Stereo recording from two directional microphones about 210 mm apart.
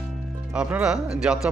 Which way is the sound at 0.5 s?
5° right (ahead or behind).